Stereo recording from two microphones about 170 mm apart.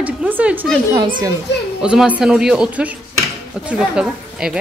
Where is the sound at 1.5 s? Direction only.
90° left.